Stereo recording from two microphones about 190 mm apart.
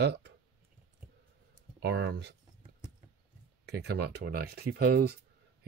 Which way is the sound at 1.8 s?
65° right (ahead or behind).